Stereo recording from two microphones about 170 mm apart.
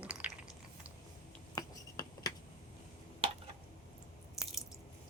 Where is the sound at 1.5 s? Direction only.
20° left (ahead or behind).